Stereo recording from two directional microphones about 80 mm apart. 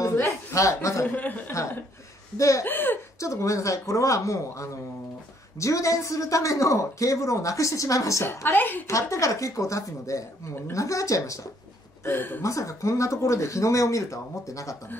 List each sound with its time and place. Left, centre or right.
0.1 s a sound: left
0.6 s speech: left
1.1 s speech: left
1.5 s speech: left
2.6 s speech: left
3.2 s speech: left
8.4 s speech: left
8.8 s speech: left
12.0 s speech: left
12.4 s speech: left